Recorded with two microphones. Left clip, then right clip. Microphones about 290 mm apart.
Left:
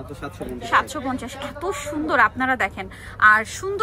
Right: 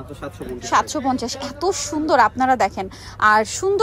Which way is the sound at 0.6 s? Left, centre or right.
Centre.